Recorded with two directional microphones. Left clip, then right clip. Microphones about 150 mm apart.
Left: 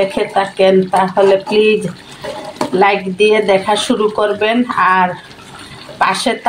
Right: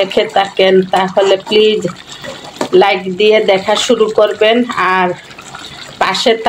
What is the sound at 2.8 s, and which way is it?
Speech, 35° right (ahead or behind).